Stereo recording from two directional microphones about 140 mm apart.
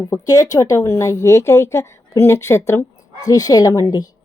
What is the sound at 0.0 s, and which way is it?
Speech, 25° left (ahead or behind).